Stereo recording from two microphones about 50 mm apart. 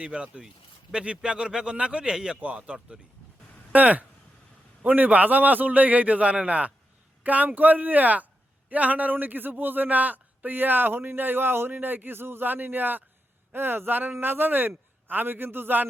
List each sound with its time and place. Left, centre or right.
0.0 s speech: right
0.4 s speech: centre
1.0 s speech: right